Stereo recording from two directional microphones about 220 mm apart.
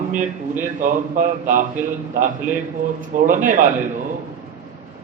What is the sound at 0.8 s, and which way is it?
A man's voice, 35° right (ahead or behind).